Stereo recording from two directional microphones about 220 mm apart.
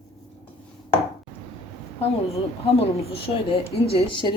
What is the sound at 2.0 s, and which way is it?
A woman's voice, 30° left (ahead or behind).